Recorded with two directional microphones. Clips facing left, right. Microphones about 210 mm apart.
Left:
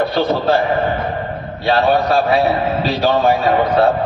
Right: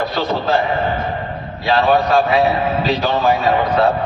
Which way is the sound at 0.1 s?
30° left (ahead or behind).